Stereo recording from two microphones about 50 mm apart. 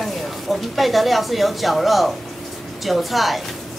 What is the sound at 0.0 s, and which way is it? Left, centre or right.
A woman's voice, centre.